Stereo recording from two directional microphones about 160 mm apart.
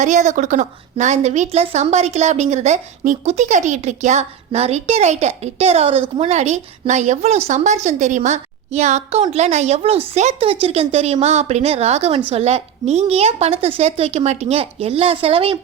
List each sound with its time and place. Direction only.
0.0 s a woman's voice: 50° right (ahead or behind)